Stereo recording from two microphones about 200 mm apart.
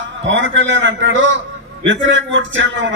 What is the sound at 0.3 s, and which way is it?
A man's voice, 70° right (ahead or behind).